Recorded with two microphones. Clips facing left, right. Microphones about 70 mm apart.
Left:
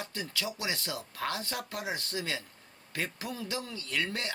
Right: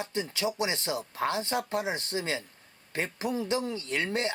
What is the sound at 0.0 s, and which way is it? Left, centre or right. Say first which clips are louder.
Speech: right 6 dB; right.